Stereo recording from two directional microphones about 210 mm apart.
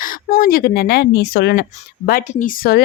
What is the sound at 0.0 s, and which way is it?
A woman's voice, 45° left (ahead or behind).